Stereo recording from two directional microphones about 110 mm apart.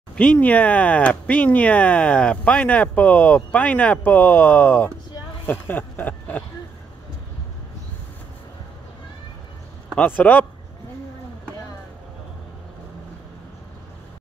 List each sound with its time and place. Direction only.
0.1 s speech: 15° left (ahead or behind)
5.5 s a sound: 15° left (ahead or behind)
9.9 s speech: 15° left (ahead or behind)